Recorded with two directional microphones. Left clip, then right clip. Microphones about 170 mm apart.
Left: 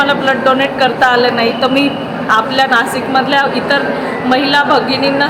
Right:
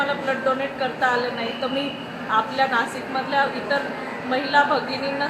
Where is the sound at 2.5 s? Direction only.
35° left (ahead or behind).